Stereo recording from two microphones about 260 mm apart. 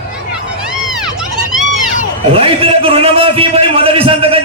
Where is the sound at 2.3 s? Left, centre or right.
Right.